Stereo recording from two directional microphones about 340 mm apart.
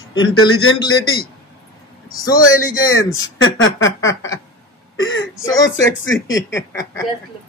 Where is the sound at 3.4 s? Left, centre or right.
Left.